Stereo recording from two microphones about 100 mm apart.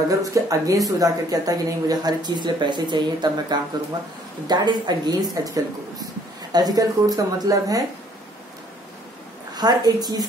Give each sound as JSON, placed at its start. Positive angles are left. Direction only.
{"t": 0.2, "sound": "speech", "side_deg": -35}
{"t": 9.6, "sound": "speech", "side_deg": -40}